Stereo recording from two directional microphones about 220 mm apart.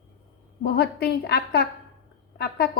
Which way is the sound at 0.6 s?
45° left (ahead or behind).